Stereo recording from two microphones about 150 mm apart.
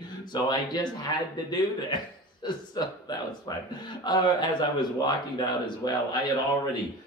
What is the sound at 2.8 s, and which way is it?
Speech, 25° left (ahead or behind).